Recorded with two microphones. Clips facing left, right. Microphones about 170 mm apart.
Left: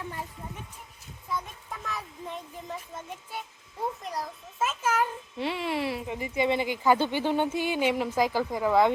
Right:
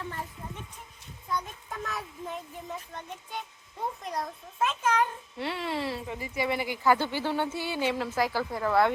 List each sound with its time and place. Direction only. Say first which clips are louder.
1.3 s child singing: right 1 dB; centre (ahead or behind)
4.0 s a child's voice: right 1 dB; centre (ahead or behind)